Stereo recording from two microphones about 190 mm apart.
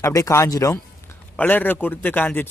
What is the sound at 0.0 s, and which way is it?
A man's voice, 15° left (ahead or behind).